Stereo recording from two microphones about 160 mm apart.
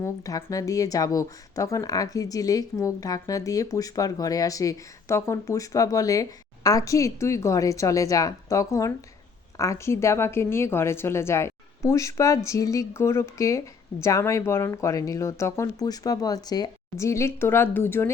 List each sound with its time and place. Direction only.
0.0 s a woman's voice: 20° left (ahead or behind)